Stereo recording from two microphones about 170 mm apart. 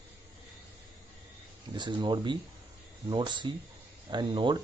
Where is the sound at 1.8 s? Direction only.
25° right (ahead or behind).